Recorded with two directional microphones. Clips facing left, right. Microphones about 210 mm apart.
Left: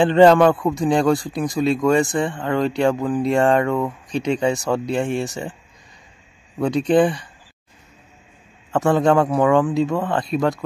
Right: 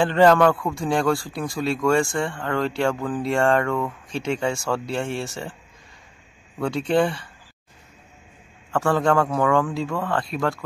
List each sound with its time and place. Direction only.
0.0 s a man's voice: 20° left (ahead or behind)
6.6 s speech: 15° left (ahead or behind)
8.7 s a man's voice: 20° left (ahead or behind)